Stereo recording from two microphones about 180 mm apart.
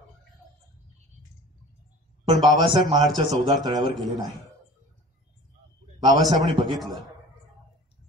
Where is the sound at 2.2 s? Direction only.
25° right (ahead or behind).